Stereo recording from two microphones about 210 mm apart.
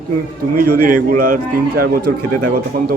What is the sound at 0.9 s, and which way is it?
A man's voice, 40° right (ahead or behind).